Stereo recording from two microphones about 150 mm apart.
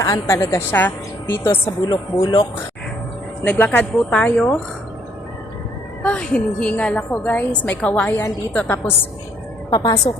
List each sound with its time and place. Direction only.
0.0 s a woman's voice: 20° left (ahead or behind)
1.9 s speech: 30° left (ahead or behind)
3.4 s a woman's voice: 10° left (ahead or behind)
6.0 s a woman's voice: 5° left (ahead or behind)
9.6 s a woman's voice: 25° left (ahead or behind)